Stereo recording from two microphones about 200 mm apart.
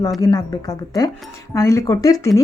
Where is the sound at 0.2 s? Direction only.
20° left (ahead or behind).